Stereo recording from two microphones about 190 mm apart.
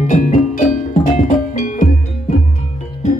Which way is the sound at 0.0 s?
40° left (ahead or behind).